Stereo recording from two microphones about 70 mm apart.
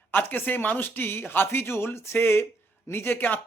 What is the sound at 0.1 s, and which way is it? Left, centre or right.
A man's voice, left.